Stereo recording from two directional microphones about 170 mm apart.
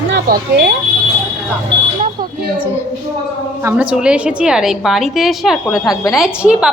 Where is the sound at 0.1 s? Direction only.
70° right (ahead or behind).